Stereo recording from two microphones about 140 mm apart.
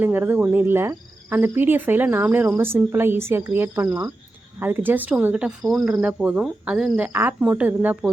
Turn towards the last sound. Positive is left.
turn(degrees=-10)  # may be behind; listen again after turning